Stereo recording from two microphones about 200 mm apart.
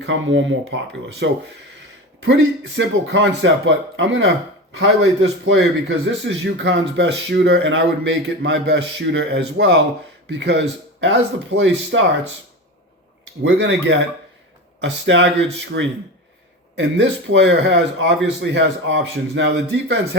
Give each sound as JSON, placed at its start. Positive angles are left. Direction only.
{"t": 0.0, "sound": "speech", "side_deg": -70}
{"t": 2.2, "sound": "speech", "side_deg": -70}
{"t": 10.2, "sound": "a man's voice", "side_deg": -60}
{"t": 13.4, "sound": "speech", "side_deg": -65}